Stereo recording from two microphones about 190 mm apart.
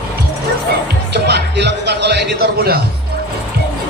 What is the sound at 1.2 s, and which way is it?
Speech, 65° right (ahead or behind).